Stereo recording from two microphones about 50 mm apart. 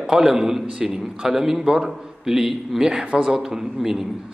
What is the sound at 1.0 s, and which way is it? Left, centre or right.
A man's voice, centre.